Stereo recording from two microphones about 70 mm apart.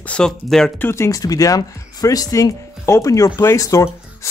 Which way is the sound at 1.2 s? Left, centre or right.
Left.